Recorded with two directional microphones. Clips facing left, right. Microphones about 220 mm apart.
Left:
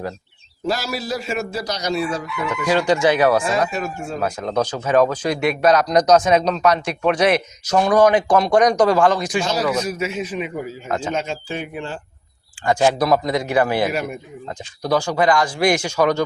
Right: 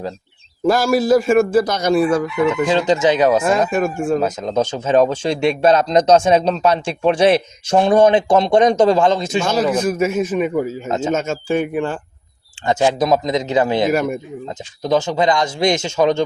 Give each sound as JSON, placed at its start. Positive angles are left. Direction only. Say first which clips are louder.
{"t": 0.7, "sound": "a man's voice", "louder": "right 10 dB", "side_deg": -50}
{"t": 2.5, "sound": "speech", "louder": "even", "side_deg": -20}
{"t": 3.7, "sound": "a man's voice", "louder": "right 9 dB", "side_deg": -50}
{"t": 4.2, "sound": "speech", "louder": "right 3 dB", "side_deg": -20}
{"t": 9.5, "sound": "a man's voice", "louder": "right 7 dB", "side_deg": -50}
{"t": 10.8, "sound": "speech", "louder": "right 4 dB", "side_deg": -25}
{"t": 11.1, "sound": "a man's voice", "louder": "right 6 dB", "side_deg": -45}
{"t": 12.6, "sound": "speech", "louder": "right 1 dB", "side_deg": -20}